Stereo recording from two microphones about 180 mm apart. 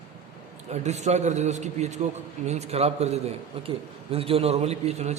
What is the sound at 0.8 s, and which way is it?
A man's voice, 40° right (ahead or behind).